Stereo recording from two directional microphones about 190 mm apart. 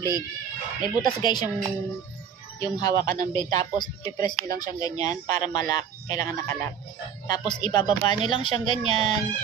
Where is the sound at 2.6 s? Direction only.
20° left (ahead or behind).